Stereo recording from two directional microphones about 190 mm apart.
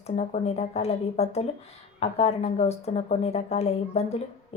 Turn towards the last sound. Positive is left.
turn(degrees=35)  # may be behind; listen again after turning